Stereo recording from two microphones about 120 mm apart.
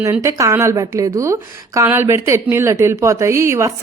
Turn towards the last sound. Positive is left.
turn(degrees=-25)  # may be behind; listen again after turning